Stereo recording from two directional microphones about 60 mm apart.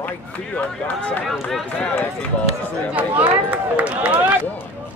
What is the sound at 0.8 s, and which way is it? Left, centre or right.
Speech, left.